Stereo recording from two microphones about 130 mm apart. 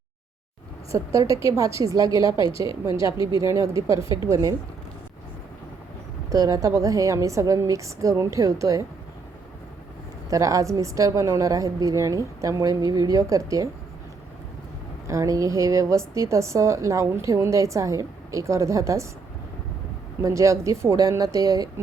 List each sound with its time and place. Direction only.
0.9 s a woman's voice: 25° right (ahead or behind)
6.3 s a woman's voice: 25° right (ahead or behind)
10.2 s a woman's voice: 25° right (ahead or behind)
15.0 s a woman's voice: 25° right (ahead or behind)
20.2 s a woman's voice: 25° right (ahead or behind)